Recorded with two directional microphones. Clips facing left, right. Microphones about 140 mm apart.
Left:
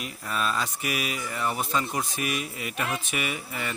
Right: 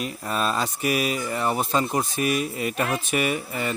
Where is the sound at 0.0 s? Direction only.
35° right (ahead or behind).